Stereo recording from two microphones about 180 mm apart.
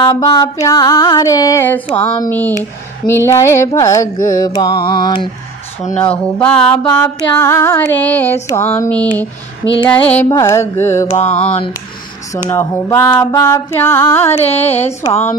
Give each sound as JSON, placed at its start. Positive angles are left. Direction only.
{"t": 0.0, "sound": "music", "side_deg": 20}
{"t": 6.3, "sound": "music", "side_deg": 5}
{"t": 11.1, "sound": "mantra", "side_deg": 35}
{"t": 12.4, "sound": "music", "side_deg": 15}
{"t": 14.5, "sound": "mantra", "side_deg": 35}